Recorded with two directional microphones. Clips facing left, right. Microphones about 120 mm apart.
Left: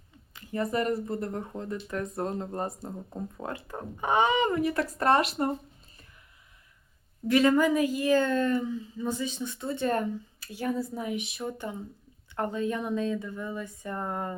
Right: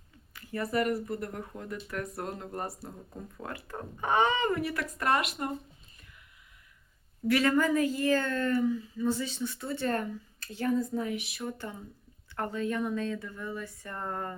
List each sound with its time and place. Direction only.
0.3 s speech: 20° left (ahead or behind)
4.8 s speech: 30° left (ahead or behind)
7.3 s a woman's voice: 20° left (ahead or behind)